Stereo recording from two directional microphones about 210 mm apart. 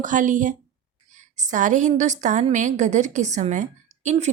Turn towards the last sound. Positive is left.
turn(degrees=-35)  # may be behind; listen again after turning